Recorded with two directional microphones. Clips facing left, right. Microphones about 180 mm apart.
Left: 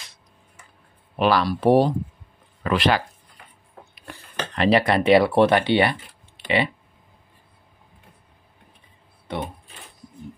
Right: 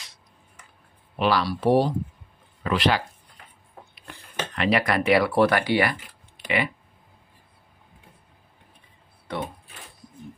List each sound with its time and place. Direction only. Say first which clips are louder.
1.1 s speech: left 3 dB; 50° left (ahead or behind)
4.6 s speech: left 4 dB; 30° left (ahead or behind)
9.3 s speech: left 1 dB; 25° left (ahead or behind)